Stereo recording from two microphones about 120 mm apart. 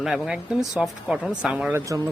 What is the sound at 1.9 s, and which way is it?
Speech, 25° right (ahead or behind).